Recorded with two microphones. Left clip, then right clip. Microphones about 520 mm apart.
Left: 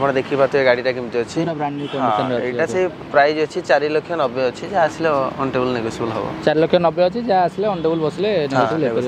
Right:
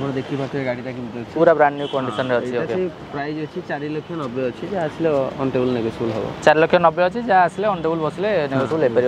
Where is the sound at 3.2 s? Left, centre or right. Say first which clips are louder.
Left 12 dB; left.